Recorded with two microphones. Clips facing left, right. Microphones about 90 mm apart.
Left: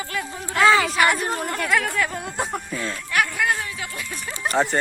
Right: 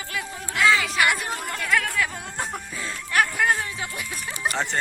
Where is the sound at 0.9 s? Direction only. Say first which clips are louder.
Left 3 dB; centre (ahead or behind).